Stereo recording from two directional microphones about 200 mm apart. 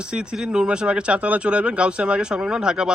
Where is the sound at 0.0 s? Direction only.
5° right (ahead or behind).